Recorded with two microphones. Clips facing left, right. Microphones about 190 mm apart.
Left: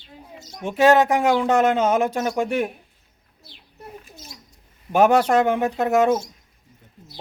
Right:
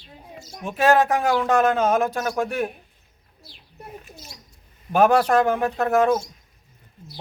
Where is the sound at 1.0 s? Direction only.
20° left (ahead or behind).